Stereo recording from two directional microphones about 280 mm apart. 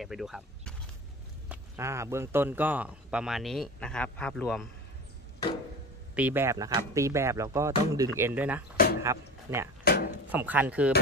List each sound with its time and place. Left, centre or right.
0.0 s speech: centre
6.1 s speech: centre
9.8 s a sound: left
10.3 s speech: centre